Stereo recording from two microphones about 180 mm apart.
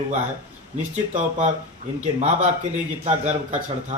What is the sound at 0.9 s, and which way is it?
Speech, 40° right (ahead or behind).